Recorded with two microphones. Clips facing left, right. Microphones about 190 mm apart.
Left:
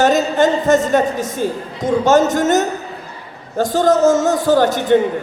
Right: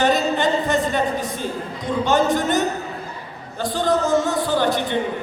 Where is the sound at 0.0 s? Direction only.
45° left (ahead or behind).